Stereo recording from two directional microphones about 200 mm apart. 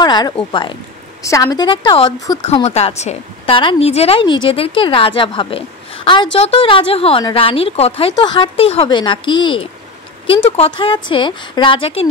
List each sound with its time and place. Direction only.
0.0 s a sound: 20° left (ahead or behind)
0.5 s a woman's voice: 25° left (ahead or behind)
2.5 s a woman's voice: 30° left (ahead or behind)